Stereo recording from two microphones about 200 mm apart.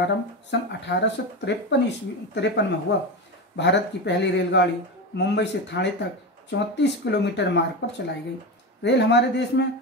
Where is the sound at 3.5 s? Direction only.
60° left (ahead or behind).